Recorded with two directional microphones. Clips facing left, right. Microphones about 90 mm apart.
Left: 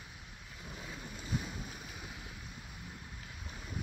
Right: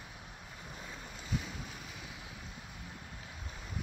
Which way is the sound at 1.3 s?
20° left (ahead or behind).